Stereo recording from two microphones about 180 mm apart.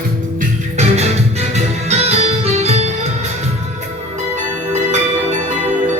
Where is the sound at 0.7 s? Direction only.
35° right (ahead or behind).